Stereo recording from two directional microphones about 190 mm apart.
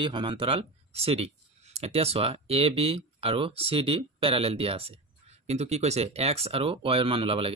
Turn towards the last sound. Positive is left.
turn(degrees=-30)  # may be behind; listen again after turning